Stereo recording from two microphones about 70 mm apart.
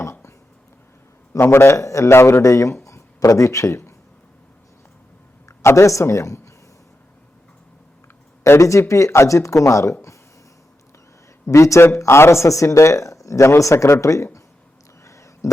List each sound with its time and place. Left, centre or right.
0.0 s a sound: left
1.3 s a man's voice: left
5.5 s speech: left
8.4 s speech: left
11.4 s speech: left
15.0 s a sound: left